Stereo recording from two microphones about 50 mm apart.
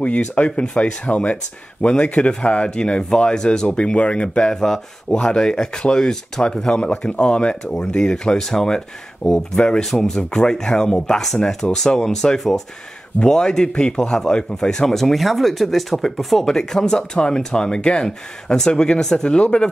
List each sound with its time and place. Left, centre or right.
0.0 s speech: left
4.4 s speech: centre
5.1 s speech: centre
9.2 s speech: left
9.6 s speech: centre